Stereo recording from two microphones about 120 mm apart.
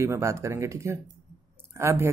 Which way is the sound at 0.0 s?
25° right (ahead or behind).